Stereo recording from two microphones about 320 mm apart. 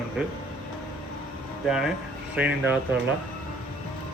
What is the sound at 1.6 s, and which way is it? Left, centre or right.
Speech, centre.